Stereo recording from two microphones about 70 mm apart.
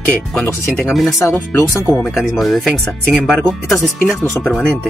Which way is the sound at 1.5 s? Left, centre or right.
Left.